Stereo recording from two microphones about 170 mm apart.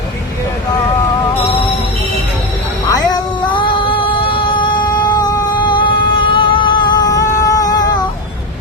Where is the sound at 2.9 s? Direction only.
25° left (ahead or behind).